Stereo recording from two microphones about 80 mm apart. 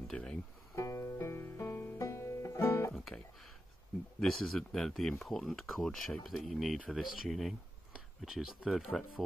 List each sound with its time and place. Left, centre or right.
0.1 s speech: centre
0.7 s music: left
4.2 s speech: centre
6.2 s speech: centre